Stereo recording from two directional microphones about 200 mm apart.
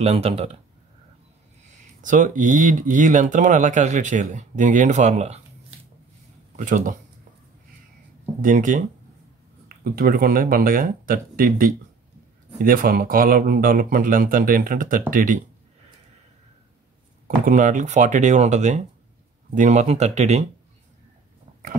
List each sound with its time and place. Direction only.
0.0 s speech: 30° right (ahead or behind)
2.0 s speech: 40° right (ahead or behind)
6.5 s speech: 40° right (ahead or behind)
8.4 s speech: 40° right (ahead or behind)
9.9 s speech: 45° right (ahead or behind)
17.5 s speech: 40° right (ahead or behind)